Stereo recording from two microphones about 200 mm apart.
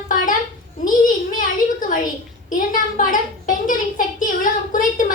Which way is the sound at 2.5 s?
40° left (ahead or behind).